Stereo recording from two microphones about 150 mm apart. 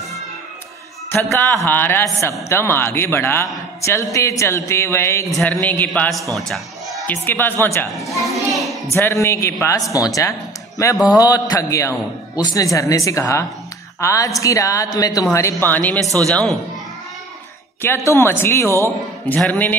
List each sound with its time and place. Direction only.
1.1 s a man's voice: 15° left (ahead or behind)
5.3 s a man's voice: 5° left (ahead or behind)
6.3 s music: centre (ahead or behind)
7.1 s a man's voice: 15° left (ahead or behind)
7.9 s a child's voice: centre (ahead or behind)
8.9 s a man's voice: 20° left (ahead or behind)
17.8 s a man's voice: 20° left (ahead or behind)